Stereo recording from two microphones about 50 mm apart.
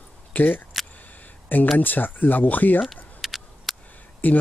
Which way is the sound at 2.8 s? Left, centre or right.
Centre.